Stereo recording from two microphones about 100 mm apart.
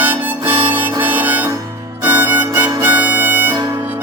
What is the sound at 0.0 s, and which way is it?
Harmonica, 20° right (ahead or behind).